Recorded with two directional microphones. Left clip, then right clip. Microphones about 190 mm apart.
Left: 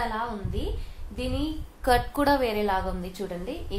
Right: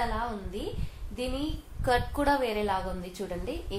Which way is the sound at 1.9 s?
30° left (ahead or behind).